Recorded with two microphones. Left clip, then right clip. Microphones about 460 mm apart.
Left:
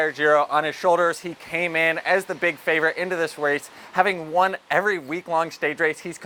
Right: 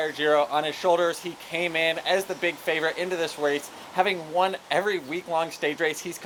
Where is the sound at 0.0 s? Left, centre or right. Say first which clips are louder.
Left 4 dB; left.